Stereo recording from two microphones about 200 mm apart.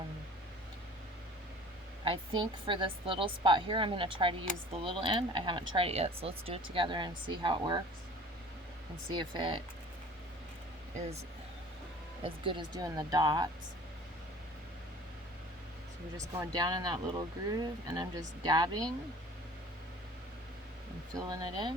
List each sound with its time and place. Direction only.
2.0 s speech: 25° right (ahead or behind)
9.0 s speech: 25° right (ahead or behind)
12.2 s speech: 25° right (ahead or behind)
16.1 s speech: 15° right (ahead or behind)
21.2 s speech: 20° right (ahead or behind)